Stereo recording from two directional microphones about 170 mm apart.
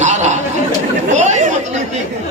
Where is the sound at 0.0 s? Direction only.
45° right (ahead or behind).